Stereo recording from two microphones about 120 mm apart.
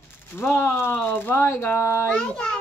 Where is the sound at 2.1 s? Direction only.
5° left (ahead or behind).